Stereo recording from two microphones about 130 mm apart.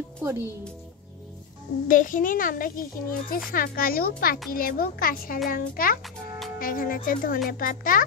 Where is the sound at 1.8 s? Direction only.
90° left.